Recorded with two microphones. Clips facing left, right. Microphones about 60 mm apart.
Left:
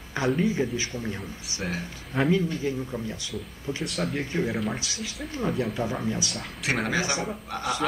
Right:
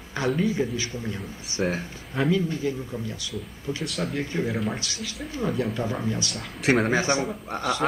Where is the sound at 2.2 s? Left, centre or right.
Centre.